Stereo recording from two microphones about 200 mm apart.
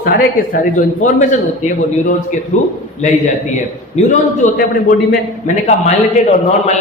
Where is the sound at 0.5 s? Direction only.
40° left (ahead or behind).